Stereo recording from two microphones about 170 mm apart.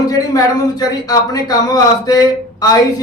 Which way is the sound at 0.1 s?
20° left (ahead or behind).